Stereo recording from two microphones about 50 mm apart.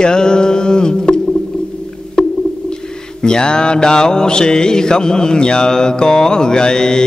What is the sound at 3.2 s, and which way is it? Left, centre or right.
Mantra, centre.